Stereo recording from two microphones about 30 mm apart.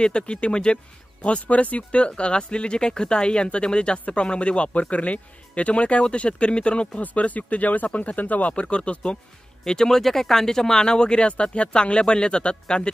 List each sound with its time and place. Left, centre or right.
0.0 s speech: left
1.5 s speech: left
1.8 s speech: left
4.7 s speech: left
7.0 s speech: left
8.5 s speech: left
9.7 s speech: centre